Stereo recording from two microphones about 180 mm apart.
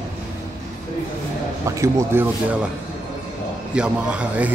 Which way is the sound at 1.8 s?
15° right (ahead or behind).